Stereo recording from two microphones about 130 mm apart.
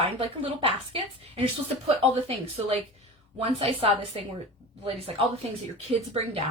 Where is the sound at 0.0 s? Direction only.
45° right (ahead or behind).